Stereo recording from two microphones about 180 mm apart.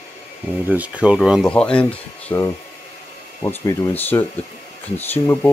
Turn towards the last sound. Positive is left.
turn(degrees=10)  # may be behind; listen again after turning